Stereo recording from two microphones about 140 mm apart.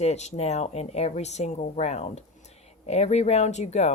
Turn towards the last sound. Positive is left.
turn(degrees=50)  # may be behind; listen again after turning